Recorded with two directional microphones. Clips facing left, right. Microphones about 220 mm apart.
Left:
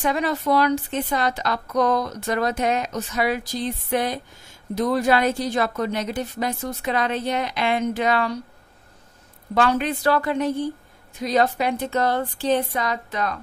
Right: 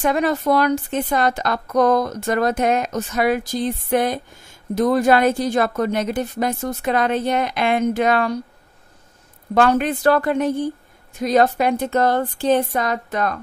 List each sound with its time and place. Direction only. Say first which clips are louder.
0.0 s a woman's voice: right 4 dB; 50° right (ahead or behind)
9.5 s a woman's voice: right 4 dB; 50° right (ahead or behind)